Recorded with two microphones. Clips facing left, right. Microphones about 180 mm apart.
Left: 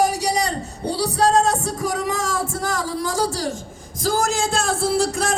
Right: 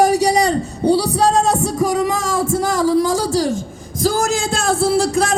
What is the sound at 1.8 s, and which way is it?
Music, 90° right.